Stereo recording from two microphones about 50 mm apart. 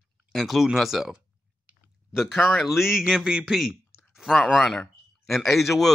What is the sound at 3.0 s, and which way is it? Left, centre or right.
Speech, centre.